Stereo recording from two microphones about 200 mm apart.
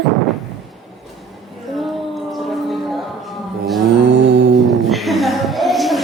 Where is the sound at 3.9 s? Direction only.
60° right (ahead or behind).